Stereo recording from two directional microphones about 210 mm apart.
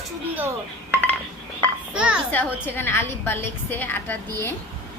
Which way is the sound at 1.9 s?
5° right (ahead or behind).